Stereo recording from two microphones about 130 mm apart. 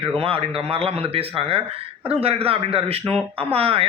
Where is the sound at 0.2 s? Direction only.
45° right (ahead or behind).